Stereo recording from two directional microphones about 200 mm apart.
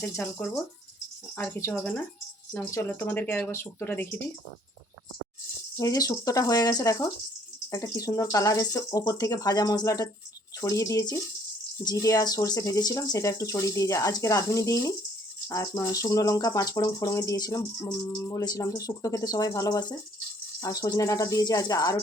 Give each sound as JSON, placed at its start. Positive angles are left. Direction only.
{"t": 0.0, "sound": "speech", "side_deg": 10}
{"t": 5.7, "sound": "speech", "side_deg": 15}